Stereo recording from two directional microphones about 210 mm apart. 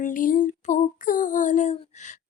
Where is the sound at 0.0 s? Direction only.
40° left (ahead or behind).